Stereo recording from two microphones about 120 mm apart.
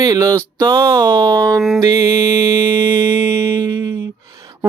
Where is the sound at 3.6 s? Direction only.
35° right (ahead or behind).